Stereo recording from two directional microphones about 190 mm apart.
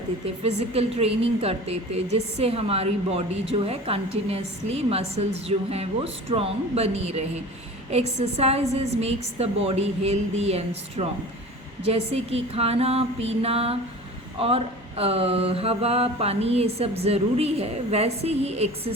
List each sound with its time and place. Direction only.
0.4 s mantra: 35° right (ahead or behind)